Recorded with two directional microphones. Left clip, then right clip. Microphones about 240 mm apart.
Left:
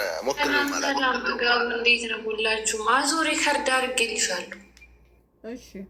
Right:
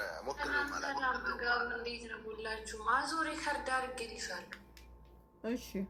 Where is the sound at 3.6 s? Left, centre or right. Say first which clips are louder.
Left 14 dB; left.